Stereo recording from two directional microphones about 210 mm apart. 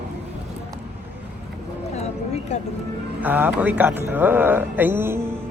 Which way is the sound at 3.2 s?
10° right (ahead or behind).